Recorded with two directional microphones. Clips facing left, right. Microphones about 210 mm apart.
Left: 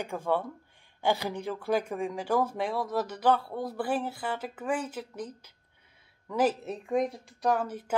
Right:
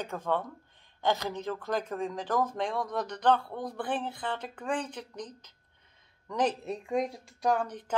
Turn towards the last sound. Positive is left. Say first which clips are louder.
# left 1 dB
turn(degrees=5)  # may be behind; listen again after turning